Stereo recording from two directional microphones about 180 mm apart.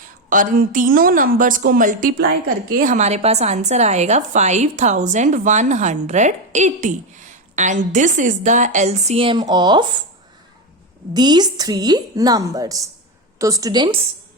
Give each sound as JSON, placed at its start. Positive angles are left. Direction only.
{"t": 0.3, "sound": "a woman's voice", "side_deg": -45}
{"t": 11.1, "sound": "a woman's voice", "side_deg": -25}